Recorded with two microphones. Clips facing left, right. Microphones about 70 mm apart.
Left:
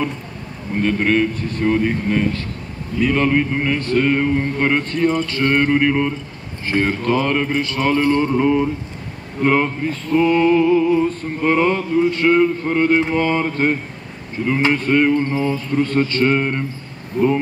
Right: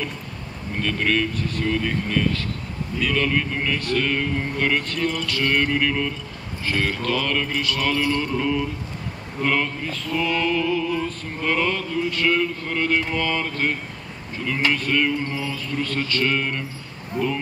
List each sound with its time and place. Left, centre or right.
0.7 s male singing: left
17.2 s speech: centre